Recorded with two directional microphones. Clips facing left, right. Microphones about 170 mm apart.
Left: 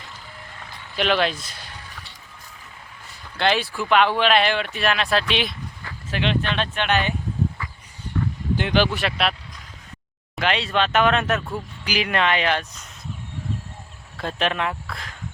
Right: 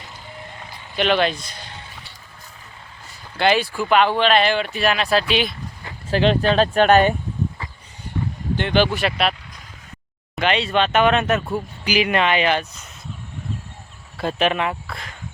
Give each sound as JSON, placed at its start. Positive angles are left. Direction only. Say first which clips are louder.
{"t": 0.9, "sound": "speech", "louder": "right 2 dB", "side_deg": 0}
{"t": 3.3, "sound": "speech", "louder": "right 3 dB", "side_deg": -5}
{"t": 6.1, "sound": "speech", "louder": "right 7 dB", "side_deg": -35}
{"t": 7.6, "sound": "a sound", "louder": "even", "side_deg": -30}
{"t": 8.5, "sound": "speech", "louder": "right 2 dB", "side_deg": 5}
{"t": 10.3, "sound": "speech", "louder": "right 3 dB", "side_deg": 0}
{"t": 14.2, "sound": "speech", "louder": "right 4 dB", "side_deg": -5}